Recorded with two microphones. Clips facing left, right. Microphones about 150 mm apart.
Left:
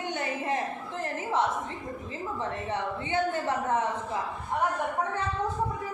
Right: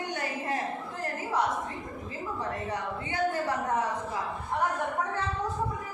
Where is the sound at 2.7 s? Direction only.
25° left (ahead or behind).